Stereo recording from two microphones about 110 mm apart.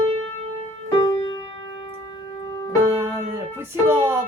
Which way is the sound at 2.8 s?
25° right (ahead or behind).